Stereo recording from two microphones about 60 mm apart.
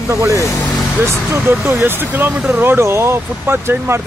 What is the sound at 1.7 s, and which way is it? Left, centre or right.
Speech, right.